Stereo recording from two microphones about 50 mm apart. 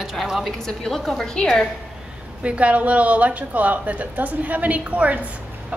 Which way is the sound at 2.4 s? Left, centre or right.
Right.